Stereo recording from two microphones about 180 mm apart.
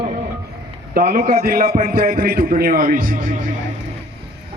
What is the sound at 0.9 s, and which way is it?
A man's voice, 60° right (ahead or behind).